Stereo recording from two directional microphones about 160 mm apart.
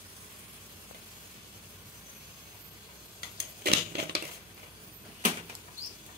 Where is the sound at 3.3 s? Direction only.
85° right.